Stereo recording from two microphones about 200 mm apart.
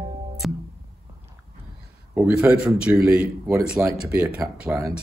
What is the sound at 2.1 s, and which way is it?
A woman's voice, 10° right (ahead or behind).